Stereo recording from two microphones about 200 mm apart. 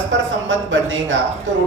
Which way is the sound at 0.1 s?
65° right (ahead or behind).